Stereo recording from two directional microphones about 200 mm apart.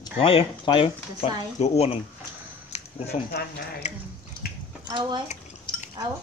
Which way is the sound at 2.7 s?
30° left (ahead or behind).